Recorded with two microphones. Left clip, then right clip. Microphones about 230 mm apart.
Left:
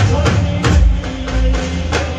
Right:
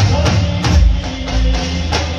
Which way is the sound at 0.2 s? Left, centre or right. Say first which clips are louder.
Left 1 dB; right.